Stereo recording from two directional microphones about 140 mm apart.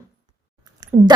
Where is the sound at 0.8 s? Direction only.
25° right (ahead or behind).